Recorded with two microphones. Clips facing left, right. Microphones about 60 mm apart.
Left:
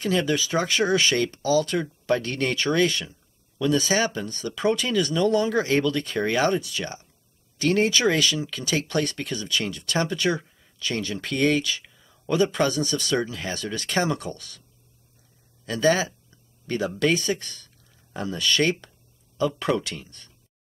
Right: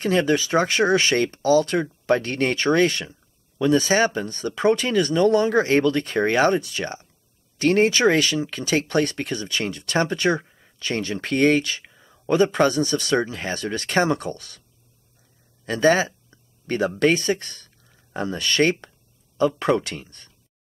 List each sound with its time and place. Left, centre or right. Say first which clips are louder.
0.0 s speech: right 4 dB; right
15.6 s a sound: right 3 dB; right
17.0 s speech: right 3 dB; right